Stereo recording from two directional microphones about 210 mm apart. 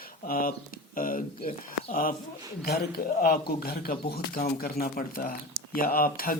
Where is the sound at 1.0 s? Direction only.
40° left (ahead or behind).